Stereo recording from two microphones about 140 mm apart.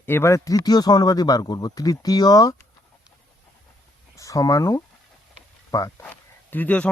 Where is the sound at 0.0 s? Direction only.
15° left (ahead or behind).